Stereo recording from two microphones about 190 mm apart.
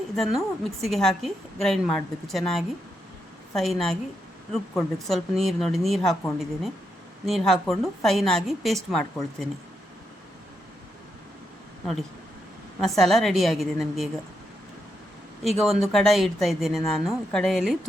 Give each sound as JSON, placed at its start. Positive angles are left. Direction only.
{"t": 0.2, "sound": "a woman's voice", "side_deg": 0}
{"t": 12.8, "sound": "a woman's voice", "side_deg": 0}
{"t": 15.4, "sound": "a woman's voice", "side_deg": 0}